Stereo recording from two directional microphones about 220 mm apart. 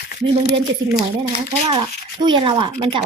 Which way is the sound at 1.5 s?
20° right (ahead or behind).